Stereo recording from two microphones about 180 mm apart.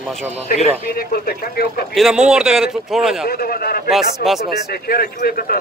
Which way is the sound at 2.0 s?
5° right (ahead or behind).